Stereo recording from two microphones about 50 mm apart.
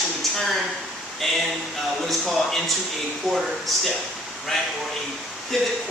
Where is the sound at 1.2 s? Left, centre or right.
Centre.